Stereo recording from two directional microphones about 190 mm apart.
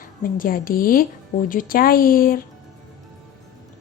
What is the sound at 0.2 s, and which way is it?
A woman's voice, 45° left (ahead or behind).